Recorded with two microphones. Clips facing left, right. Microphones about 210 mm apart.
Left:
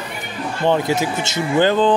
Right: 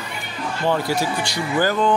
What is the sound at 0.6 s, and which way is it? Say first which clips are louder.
Speech: left 3 dB; 20° left (ahead or behind).